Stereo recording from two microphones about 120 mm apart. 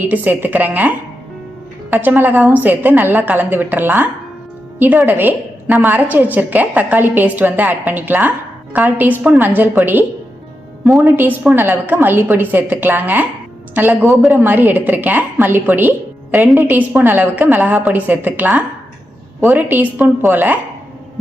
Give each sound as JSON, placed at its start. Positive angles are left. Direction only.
{"t": 0.0, "sound": "a woman's voice", "side_deg": -15}
{"t": 11.4, "sound": "a woman's voice", "side_deg": -15}